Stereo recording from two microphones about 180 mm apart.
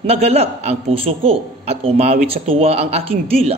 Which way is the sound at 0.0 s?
35° right (ahead or behind).